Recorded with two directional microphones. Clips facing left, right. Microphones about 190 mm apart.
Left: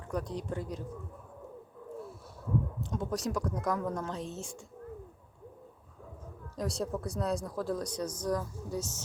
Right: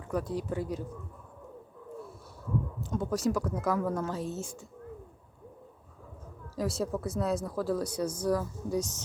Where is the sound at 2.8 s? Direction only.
Centre (ahead or behind).